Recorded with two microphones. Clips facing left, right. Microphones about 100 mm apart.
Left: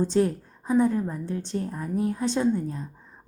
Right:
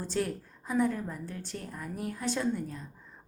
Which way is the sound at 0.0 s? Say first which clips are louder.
Left 9 dB; 25° left (ahead or behind).